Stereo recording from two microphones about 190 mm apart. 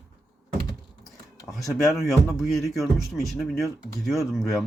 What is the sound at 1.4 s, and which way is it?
Speech, centre (ahead or behind).